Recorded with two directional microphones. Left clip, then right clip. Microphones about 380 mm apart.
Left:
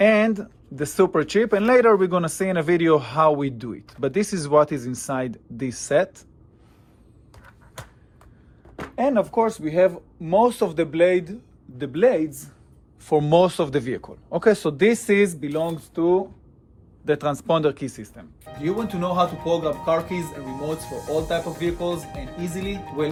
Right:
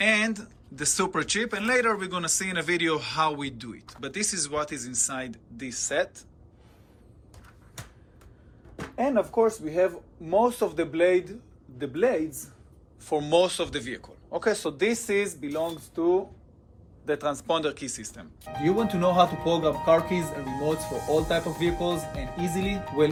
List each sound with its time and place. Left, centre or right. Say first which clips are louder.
0.0 s speech: left 6 dB; centre
9.0 s speech: left 3 dB; left
17.2 s speech: left 5 dB; centre